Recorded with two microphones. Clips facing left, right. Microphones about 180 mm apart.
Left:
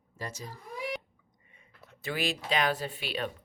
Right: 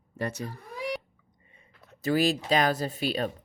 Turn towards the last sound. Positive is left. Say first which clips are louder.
# right 6 dB
turn(degrees=-40)  # may be behind; listen again after turning